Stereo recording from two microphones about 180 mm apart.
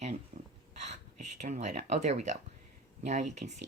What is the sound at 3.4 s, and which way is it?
Speech, 60° right (ahead or behind).